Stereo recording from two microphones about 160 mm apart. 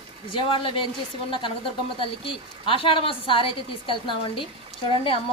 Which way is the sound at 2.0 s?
35° left (ahead or behind).